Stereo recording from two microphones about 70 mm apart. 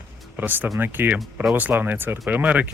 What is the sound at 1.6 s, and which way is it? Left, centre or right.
Speech, right.